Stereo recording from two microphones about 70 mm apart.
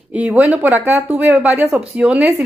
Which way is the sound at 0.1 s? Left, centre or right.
Centre.